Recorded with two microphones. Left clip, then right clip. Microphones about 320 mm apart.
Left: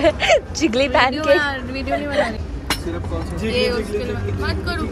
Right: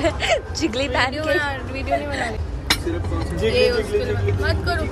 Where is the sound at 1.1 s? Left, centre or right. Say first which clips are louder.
Left 5 dB; centre.